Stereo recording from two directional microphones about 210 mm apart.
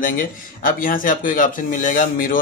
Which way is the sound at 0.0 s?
40° left (ahead or behind).